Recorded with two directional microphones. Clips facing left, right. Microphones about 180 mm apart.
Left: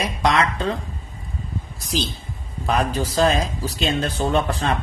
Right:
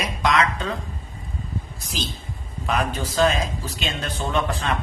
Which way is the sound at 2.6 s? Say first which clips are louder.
Left 3 dB; 35° left (ahead or behind).